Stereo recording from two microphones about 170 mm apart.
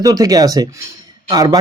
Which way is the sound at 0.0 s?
20° right (ahead or behind).